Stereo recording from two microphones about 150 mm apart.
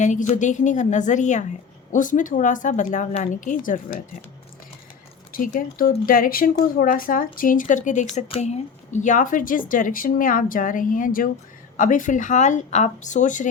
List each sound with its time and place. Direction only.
0.0 s speech: 55° left (ahead or behind)
5.3 s speech: 70° left (ahead or behind)
8.0 s speech: 45° left (ahead or behind)